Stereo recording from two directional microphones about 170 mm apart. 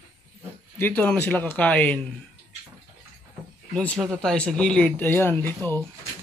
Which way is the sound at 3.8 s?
5° left (ahead or behind).